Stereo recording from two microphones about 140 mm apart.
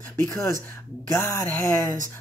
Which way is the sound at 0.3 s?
20° left (ahead or behind).